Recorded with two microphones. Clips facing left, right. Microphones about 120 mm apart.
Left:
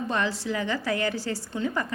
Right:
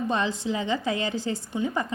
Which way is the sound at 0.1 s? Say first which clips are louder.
Left 1 dB; 20° right (ahead or behind).